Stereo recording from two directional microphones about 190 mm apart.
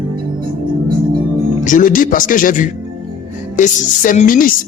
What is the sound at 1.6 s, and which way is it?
Speech, 45° left (ahead or behind).